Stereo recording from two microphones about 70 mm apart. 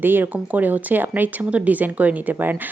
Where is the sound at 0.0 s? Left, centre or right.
Right.